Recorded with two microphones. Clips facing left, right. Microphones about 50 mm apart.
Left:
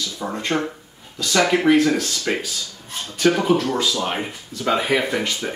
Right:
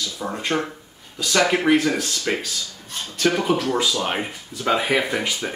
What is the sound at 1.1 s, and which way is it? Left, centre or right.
Speech, centre.